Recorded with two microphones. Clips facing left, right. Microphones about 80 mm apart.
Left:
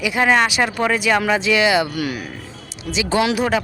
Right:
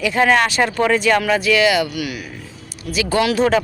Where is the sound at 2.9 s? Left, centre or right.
Left.